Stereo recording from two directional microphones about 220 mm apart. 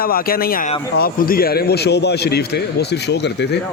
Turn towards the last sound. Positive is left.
turn(degrees=50)  # may be behind; listen again after turning